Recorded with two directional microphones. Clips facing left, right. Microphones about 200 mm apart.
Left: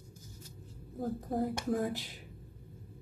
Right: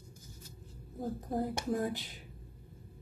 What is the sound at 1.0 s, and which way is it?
Speech, centre (ahead or behind).